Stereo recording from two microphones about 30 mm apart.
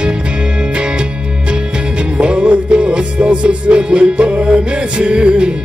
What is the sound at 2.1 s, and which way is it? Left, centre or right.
Music, right.